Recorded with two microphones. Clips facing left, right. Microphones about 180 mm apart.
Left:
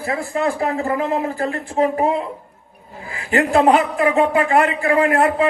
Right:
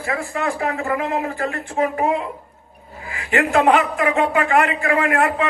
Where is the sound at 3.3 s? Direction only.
35° left (ahead or behind).